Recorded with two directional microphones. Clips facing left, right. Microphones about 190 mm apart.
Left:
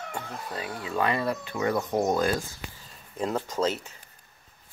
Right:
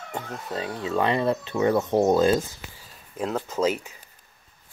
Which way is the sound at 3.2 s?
5° right (ahead or behind).